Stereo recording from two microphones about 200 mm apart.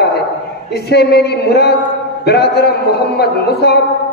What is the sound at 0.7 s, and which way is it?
A man's voice, 55° left (ahead or behind).